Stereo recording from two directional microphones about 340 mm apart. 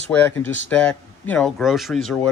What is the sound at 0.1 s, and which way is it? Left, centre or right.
Speech, centre.